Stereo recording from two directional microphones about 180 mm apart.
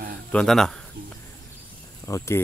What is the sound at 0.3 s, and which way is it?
Speech, 5° left (ahead or behind).